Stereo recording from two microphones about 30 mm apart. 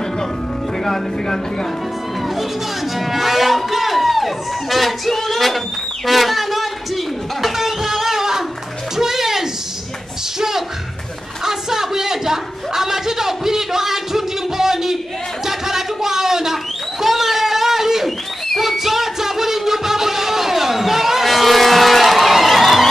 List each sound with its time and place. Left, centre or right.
0.8 s speech: centre
3.0 s a sound: centre
7.4 s music: centre
8.9 s bathtub: centre
11.4 s a sound: centre
18.6 s music: centre